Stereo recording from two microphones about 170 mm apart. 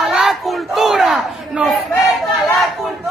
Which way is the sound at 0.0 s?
Centre (ahead or behind).